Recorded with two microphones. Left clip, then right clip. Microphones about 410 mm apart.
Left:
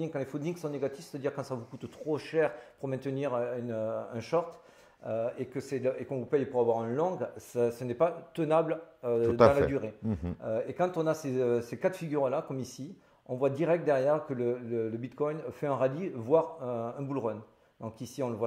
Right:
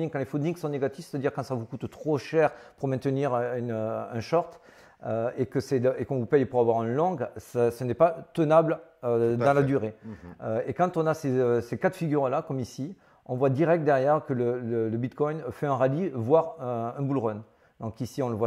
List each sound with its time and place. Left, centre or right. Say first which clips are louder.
0.0 s speech: right 5 dB; right
5.0 s speech: right 4 dB; right